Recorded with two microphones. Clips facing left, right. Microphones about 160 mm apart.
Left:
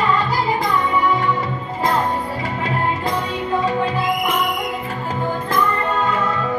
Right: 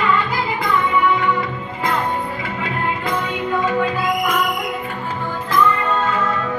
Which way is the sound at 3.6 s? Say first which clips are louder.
Right 1 dB; 30° left (ahead or behind).